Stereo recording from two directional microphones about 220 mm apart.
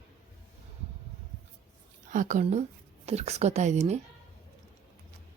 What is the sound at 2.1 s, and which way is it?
A woman's voice, 35° right (ahead or behind).